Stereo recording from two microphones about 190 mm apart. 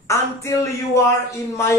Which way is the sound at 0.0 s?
15° left (ahead or behind).